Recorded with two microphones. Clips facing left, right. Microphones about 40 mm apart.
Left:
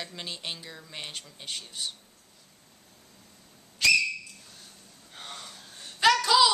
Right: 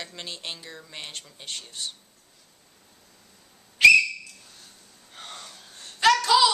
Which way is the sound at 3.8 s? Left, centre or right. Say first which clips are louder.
Right 8 dB; right.